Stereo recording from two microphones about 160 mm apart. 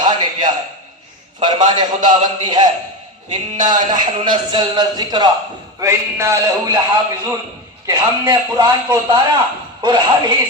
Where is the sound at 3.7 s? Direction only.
25° right (ahead or behind).